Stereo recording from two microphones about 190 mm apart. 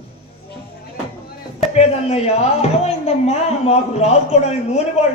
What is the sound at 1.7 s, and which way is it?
A man's voice, 35° left (ahead or behind).